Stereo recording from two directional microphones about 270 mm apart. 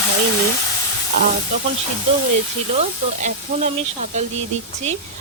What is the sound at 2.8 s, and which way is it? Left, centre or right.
Speech, right.